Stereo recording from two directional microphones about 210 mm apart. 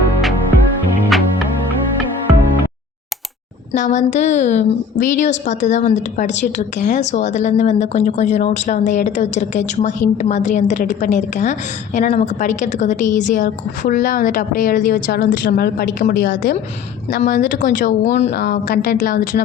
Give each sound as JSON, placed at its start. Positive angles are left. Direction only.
{"t": 3.7, "sound": "a woman's voice", "side_deg": 35}